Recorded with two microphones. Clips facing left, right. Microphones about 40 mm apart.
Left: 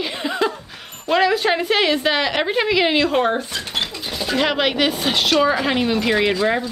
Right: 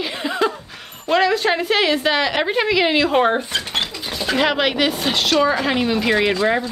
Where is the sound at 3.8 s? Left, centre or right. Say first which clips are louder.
Right 1 dB; centre.